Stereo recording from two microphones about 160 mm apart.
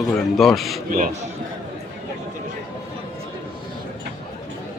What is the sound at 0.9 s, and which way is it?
Speech, 60° right (ahead or behind).